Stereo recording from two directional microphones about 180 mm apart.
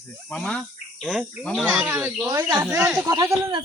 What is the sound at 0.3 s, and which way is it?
Cricket, 5° left (ahead or behind).